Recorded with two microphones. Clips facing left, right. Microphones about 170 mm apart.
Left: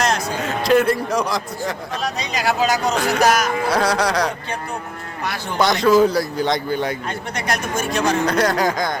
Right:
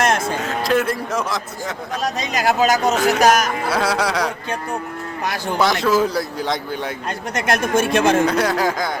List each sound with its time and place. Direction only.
0.0 s a sound: 55° right (ahead or behind)
0.3 s a man's voice: centre (ahead or behind)
2.0 s speech: 45° right (ahead or behind)
3.7 s a man's voice: 5° right (ahead or behind)
5.5 s a man's voice: 5° right (ahead or behind)
7.3 s speech: 55° right (ahead or behind)
8.3 s a man's voice: 5° right (ahead or behind)